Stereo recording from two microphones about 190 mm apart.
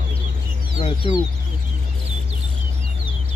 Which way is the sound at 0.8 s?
25° left (ahead or behind).